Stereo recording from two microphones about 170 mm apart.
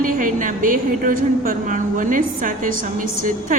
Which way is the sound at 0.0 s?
50° right (ahead or behind).